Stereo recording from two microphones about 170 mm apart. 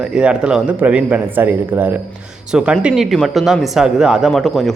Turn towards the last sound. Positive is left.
turn(degrees=0)  # may be behind; listen again after turning